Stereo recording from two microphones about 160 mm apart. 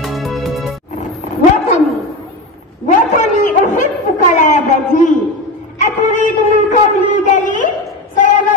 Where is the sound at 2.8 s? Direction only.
50° left (ahead or behind).